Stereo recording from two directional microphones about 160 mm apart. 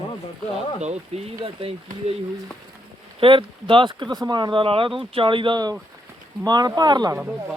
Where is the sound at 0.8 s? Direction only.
45° right (ahead or behind).